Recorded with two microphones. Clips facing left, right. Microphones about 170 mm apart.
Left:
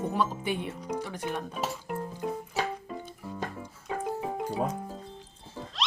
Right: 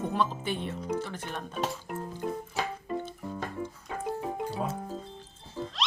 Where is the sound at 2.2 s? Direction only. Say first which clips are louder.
Even; centre (ahead or behind).